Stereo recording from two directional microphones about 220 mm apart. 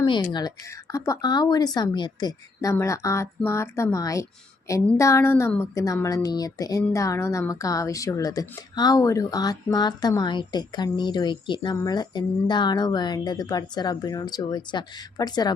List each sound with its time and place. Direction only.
0.0 s a woman's voice: 20° left (ahead or behind)